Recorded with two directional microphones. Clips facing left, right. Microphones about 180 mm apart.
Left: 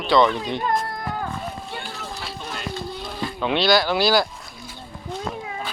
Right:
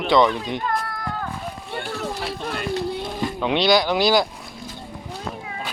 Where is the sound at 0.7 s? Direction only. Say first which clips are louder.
Left 2 dB; 20° left (ahead or behind).